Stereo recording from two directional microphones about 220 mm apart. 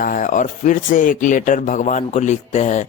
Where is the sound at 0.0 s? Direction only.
35° left (ahead or behind).